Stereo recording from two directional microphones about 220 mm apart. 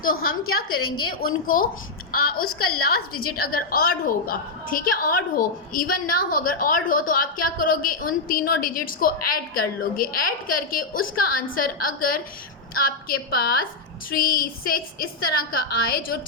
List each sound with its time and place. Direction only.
0.0 s a woman's voice: 40° left (ahead or behind)
0.4 s a woman's voice: 75° left (ahead or behind)
1.5 s a woman's voice: 40° left (ahead or behind)
2.4 s a woman's voice: 80° left
3.3 s a woman's voice: 40° left (ahead or behind)